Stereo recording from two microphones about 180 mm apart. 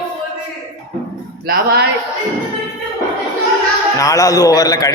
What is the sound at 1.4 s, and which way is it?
Speech, 55° right (ahead or behind).